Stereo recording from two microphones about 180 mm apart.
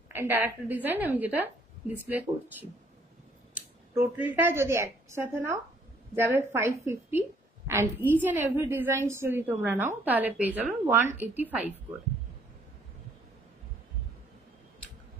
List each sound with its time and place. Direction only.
0.1 s a woman's voice: 10° right (ahead or behind)
3.5 s a woman's voice: 10° right (ahead or behind)